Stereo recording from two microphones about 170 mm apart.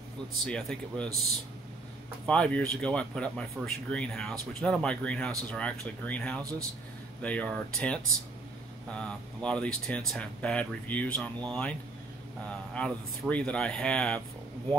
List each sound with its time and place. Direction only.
0.5 s speech: 5° left (ahead or behind)
2.2 s speech: 5° left (ahead or behind)